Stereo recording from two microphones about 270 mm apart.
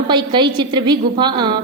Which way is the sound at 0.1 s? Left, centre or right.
Centre.